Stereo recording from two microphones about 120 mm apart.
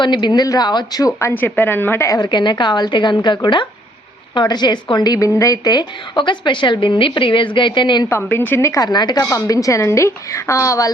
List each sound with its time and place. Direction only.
0.0 s a woman's voice: 40° left (ahead or behind)
1.3 s a woman's voice: 15° left (ahead or behind)
2.2 s a woman's voice: 40° left (ahead or behind)
8.1 s a woman's voice: 20° left (ahead or behind)